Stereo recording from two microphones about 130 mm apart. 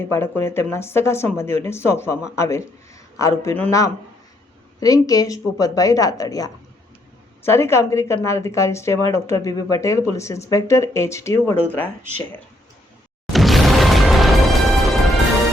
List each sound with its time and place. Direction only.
0.1 s speech: 20° left (ahead or behind)
13.3 s music: centre (ahead or behind)